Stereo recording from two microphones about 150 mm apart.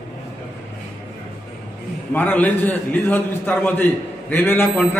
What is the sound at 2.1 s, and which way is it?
A man's voice, 10° left (ahead or behind).